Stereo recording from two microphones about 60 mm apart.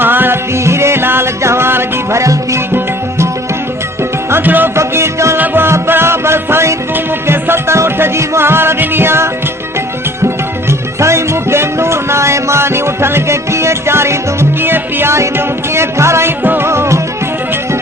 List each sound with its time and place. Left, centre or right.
0.0 s music: right
0.5 s music: right
4.3 s music: right
4.7 s music: right
11.0 s music: right
15.1 s music: right
16.4 s music: right
16.6 s music: right